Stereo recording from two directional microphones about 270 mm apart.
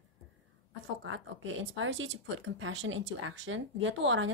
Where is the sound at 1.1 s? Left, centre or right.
Right.